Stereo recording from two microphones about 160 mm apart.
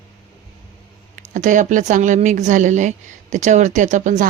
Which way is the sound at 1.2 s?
50° right (ahead or behind).